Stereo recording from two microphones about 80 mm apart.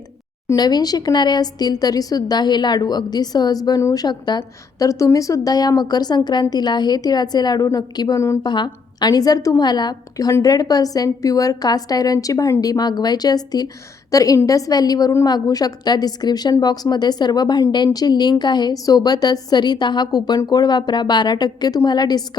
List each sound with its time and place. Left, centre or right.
0.5 s a woman's voice: left
3.9 s a woman's voice: left
4.8 s a woman's voice: left
8.4 s a woman's voice: left
9.6 s a woman's voice: left
14.1 s a woman's voice: left